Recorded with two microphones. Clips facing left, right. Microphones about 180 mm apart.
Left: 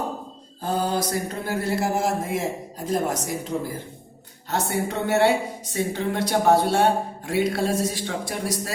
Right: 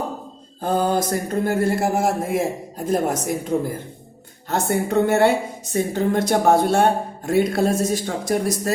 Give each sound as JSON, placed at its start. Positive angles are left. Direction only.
{"t": 0.6, "sound": "speech", "side_deg": -50}